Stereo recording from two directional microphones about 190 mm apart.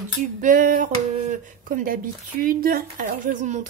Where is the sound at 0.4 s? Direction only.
45° right (ahead or behind).